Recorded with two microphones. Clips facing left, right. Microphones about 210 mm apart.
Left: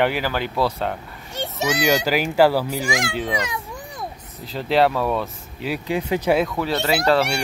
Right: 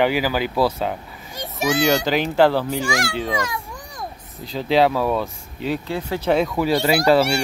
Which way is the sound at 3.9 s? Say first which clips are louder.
Even; centre (ahead or behind).